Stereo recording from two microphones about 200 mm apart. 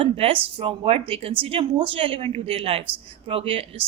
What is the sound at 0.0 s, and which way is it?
Speech, 30° right (ahead or behind).